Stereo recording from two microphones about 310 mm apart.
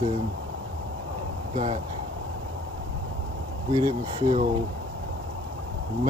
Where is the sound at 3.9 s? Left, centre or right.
Right.